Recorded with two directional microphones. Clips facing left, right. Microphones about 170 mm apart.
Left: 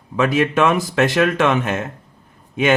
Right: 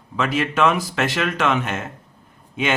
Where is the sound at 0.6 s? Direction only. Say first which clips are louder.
Left 3 dB; 45° left (ahead or behind).